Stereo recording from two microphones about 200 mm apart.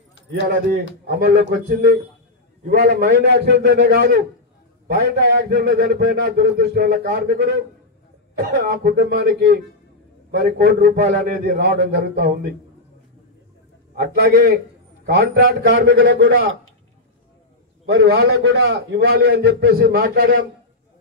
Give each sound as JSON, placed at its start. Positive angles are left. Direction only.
{"t": 1.2, "sound": "a man's voice", "side_deg": -50}
{"t": 13.9, "sound": "a man's voice", "side_deg": -50}
{"t": 17.8, "sound": "a man's voice", "side_deg": -55}